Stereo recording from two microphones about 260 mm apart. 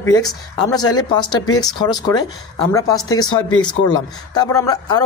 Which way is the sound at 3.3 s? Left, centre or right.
Centre.